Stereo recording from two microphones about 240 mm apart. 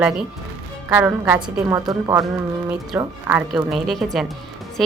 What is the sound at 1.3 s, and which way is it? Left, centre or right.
A woman's voice, centre.